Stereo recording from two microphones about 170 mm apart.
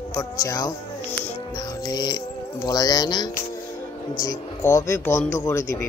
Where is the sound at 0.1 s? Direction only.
20° left (ahead or behind).